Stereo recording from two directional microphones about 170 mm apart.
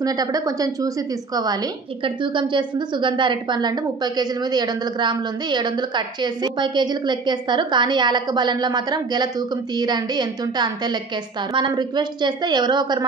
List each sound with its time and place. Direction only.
0.0 s a woman's voice: 20° right (ahead or behind)